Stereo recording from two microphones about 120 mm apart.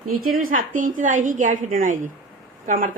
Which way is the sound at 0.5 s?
90° right.